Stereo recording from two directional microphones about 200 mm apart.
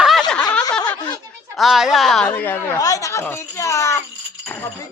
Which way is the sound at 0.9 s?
20° left (ahead or behind).